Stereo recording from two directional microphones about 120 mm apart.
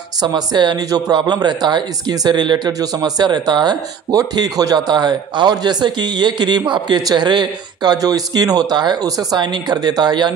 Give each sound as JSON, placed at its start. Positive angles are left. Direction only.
{"t": 0.2, "sound": "speech", "side_deg": -35}